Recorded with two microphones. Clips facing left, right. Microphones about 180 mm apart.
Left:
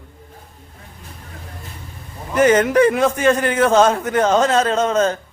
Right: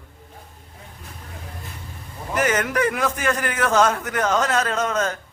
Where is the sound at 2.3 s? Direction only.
30° left (ahead or behind).